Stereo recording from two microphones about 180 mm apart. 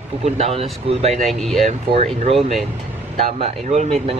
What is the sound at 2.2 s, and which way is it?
Speech, 35° right (ahead or behind).